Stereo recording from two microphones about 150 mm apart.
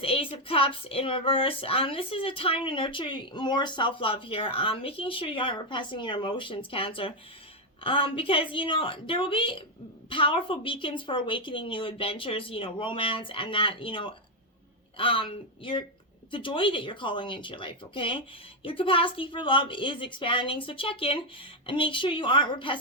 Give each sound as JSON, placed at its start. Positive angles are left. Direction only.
{"t": 0.0, "sound": "speech", "side_deg": 40}